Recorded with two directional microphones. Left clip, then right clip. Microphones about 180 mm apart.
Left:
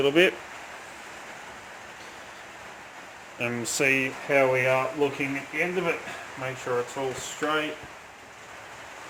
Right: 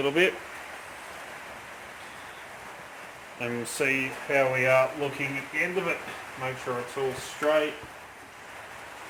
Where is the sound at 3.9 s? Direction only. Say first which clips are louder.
Left 4 dB; 60° left (ahead or behind).